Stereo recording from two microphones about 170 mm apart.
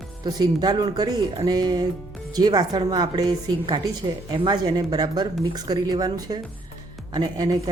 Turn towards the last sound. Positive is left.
turn(degrees=-25)  # may be behind; listen again after turning